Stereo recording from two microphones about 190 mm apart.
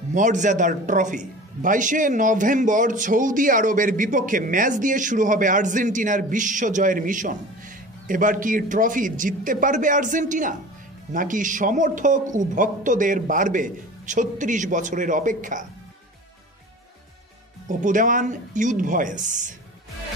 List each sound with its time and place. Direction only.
0.1 s a man's voice: 40° right (ahead or behind)
17.6 s speech: 40° right (ahead or behind)